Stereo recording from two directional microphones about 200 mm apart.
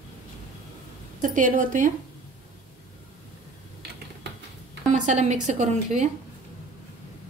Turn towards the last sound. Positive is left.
turn(degrees=-35)  # may be behind; listen again after turning